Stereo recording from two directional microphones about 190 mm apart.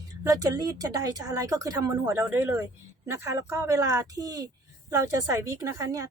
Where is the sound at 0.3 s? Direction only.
20° right (ahead or behind).